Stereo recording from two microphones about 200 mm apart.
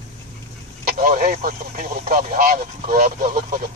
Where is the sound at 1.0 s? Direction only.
45° right (ahead or behind).